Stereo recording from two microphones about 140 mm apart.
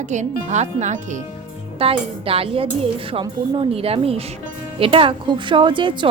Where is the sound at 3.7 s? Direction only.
45° right (ahead or behind).